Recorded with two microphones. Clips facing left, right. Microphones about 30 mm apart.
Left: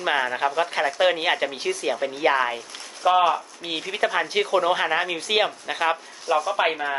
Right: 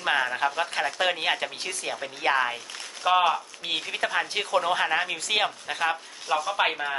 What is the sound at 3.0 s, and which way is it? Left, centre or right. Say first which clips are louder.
Speech: left 3 dB; centre.